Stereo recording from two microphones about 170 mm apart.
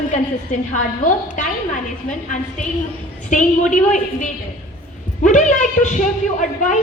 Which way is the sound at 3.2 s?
45° left (ahead or behind).